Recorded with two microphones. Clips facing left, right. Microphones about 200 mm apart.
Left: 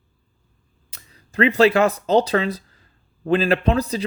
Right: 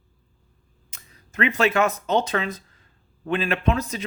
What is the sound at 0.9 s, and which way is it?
A man's voice, 35° left (ahead or behind).